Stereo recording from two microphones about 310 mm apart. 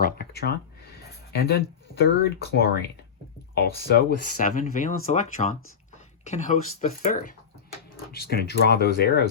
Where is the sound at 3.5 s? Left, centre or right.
Left.